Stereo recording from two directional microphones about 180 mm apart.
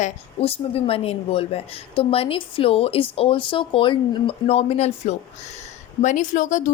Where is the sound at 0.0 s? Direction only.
35° left (ahead or behind).